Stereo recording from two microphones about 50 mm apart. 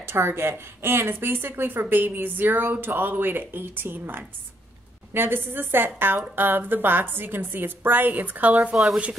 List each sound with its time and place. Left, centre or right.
0.0 s a woman's voice: right
8.7 s speech: centre